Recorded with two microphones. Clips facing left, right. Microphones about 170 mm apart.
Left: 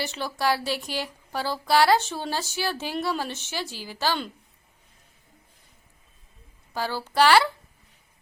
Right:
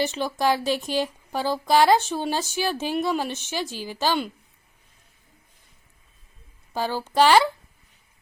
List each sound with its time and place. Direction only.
0.0 s speech: 20° right (ahead or behind)
6.7 s a woman's voice: 20° right (ahead or behind)